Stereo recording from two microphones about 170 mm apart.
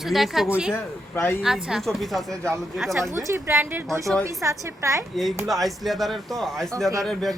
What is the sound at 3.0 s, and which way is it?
A woman's voice, 15° right (ahead or behind).